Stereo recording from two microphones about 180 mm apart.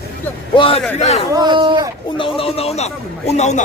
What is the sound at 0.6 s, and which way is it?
Speech, 30° left (ahead or behind).